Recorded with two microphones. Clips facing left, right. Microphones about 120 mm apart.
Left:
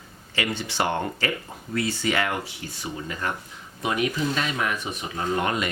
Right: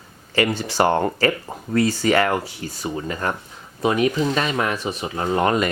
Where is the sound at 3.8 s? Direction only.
35° right (ahead or behind).